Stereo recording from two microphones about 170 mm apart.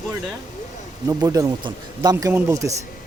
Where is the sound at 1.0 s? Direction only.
20° right (ahead or behind).